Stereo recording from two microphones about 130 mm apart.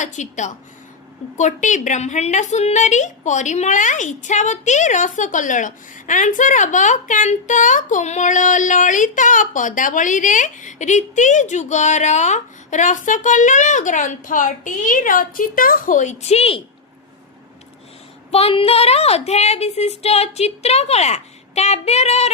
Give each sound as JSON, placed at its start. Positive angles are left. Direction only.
{"t": 0.0, "sound": "a woman's voice", "side_deg": 70}
{"t": 18.3, "sound": "speech", "side_deg": 50}